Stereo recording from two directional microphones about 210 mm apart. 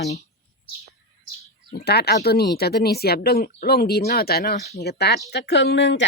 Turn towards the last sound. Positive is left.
turn(degrees=55)  # may be behind; listen again after turning